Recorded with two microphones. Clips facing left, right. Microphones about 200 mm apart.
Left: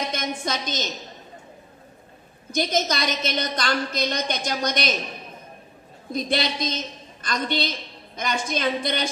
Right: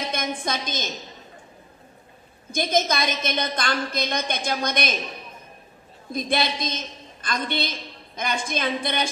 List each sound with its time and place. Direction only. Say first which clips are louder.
0.1 s a woman's voice: even; 50° right (ahead or behind)
2.5 s a woman's voice: right 1 dB; 50° right (ahead or behind)
6.1 s a woman's voice: even; 50° right (ahead or behind)